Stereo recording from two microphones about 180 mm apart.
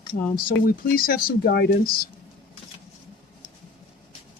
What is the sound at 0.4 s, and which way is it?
Speech, 55° left (ahead or behind).